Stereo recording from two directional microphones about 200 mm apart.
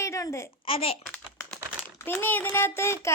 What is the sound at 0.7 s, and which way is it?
Speech, 30° left (ahead or behind).